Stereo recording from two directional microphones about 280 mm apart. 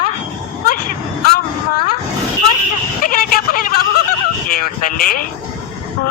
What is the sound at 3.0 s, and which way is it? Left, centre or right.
Vehicle, left.